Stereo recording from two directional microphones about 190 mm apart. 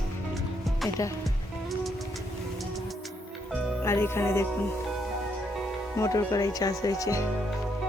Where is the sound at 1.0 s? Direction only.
15° left (ahead or behind).